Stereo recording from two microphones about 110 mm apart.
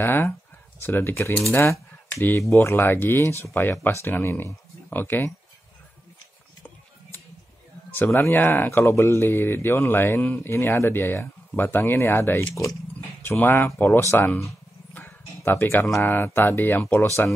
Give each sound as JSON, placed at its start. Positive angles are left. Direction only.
{"t": 0.0, "sound": "speech", "side_deg": 20}
{"t": 7.9, "sound": "speech", "side_deg": 20}